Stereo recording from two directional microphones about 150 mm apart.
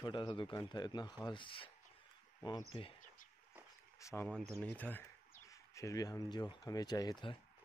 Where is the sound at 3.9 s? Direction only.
20° left (ahead or behind).